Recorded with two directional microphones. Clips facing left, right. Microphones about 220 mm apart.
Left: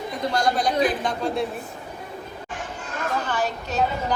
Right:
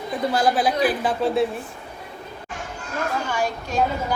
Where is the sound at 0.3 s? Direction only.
5° right (ahead or behind).